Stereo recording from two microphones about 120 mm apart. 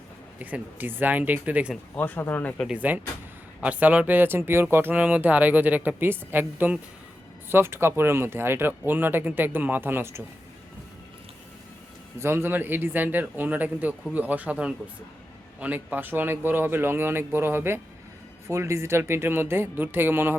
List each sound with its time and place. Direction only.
0.3 s speech: 15° right (ahead or behind)
2.0 s speech: 15° left (ahead or behind)
2.6 s speech: 15° right (ahead or behind)
12.2 s speech: 20° right (ahead or behind)